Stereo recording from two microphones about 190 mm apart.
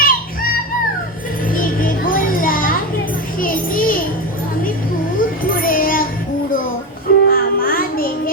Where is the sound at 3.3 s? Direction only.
45° left (ahead or behind).